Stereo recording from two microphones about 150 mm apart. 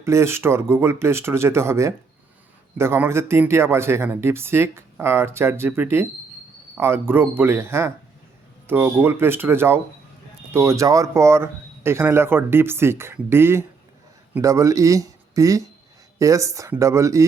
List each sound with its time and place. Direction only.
0.0 s speech: 20° right (ahead or behind)